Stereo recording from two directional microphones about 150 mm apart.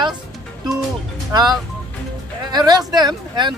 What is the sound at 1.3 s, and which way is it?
Speech, 25° right (ahead or behind).